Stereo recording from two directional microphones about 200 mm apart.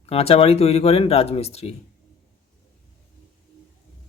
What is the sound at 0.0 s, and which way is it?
Speech, 30° left (ahead or behind).